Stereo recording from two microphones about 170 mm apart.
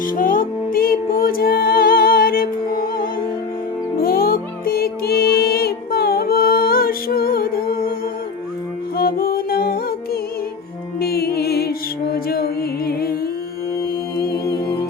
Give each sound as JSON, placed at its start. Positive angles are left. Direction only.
{"t": 0.1, "sound": "music", "side_deg": 55}
{"t": 9.0, "sound": "music", "side_deg": 60}
{"t": 14.2, "sound": "music", "side_deg": 65}